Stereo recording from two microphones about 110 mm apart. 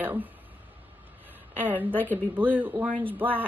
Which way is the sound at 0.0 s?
15° right (ahead or behind).